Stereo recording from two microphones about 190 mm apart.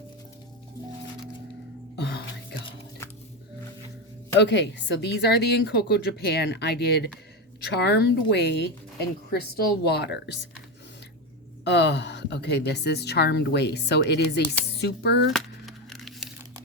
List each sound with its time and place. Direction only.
2.0 s music: 60° left (ahead or behind)
4.4 s a woman's voice: 65° left (ahead or behind)
9.8 s a woman's voice: 60° left (ahead or behind)
11.6 s a woman's voice: 65° left (ahead or behind)
15.3 s crumpling: centre (ahead or behind)